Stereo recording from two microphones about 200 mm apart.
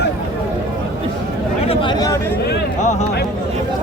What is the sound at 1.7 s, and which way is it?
Chatter, 25° left (ahead or behind).